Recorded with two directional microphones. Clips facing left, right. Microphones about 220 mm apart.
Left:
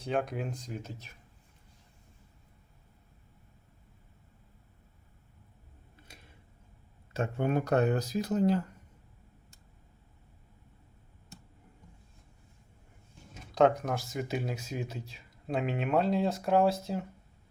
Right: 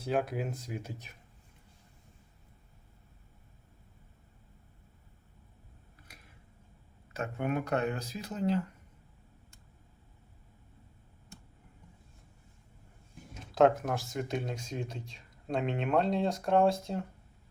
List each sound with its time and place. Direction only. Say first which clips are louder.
0.0 s speech: right 1 dB; 5° right (ahead or behind)
7.1 s speech: left 3 dB; 30° left (ahead or behind)
13.5 s speech: even; 5° right (ahead or behind)